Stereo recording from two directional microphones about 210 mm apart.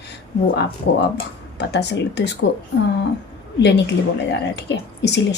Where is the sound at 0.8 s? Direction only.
50° left (ahead or behind).